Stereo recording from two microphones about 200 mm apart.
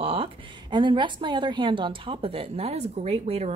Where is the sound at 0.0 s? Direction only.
25° right (ahead or behind).